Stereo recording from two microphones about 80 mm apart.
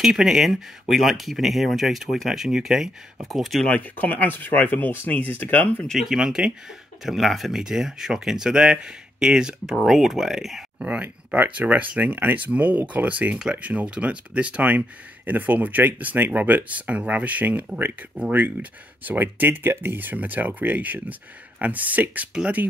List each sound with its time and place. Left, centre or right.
0.0 s speech: centre
3.6 s speech: centre
5.9 s speech: centre
10.9 s speech: centre